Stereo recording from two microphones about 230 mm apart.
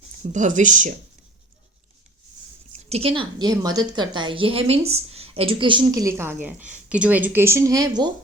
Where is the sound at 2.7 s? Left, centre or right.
Right.